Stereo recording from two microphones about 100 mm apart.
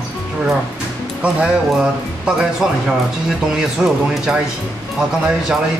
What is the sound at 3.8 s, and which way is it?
Speech, 5° right (ahead or behind).